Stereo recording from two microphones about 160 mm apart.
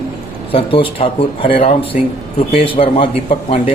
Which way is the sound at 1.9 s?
55° left (ahead or behind).